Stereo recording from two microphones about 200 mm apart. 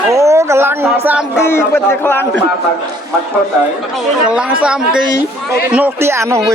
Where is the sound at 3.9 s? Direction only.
5° right (ahead or behind).